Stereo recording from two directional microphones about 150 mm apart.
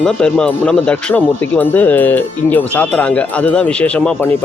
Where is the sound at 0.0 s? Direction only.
5° left (ahead or behind).